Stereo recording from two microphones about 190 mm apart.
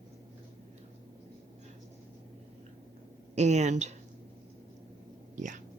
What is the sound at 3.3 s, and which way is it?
Speech, 35° right (ahead or behind).